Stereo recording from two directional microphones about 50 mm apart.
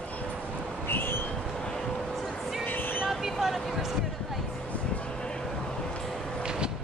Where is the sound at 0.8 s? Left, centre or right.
Left.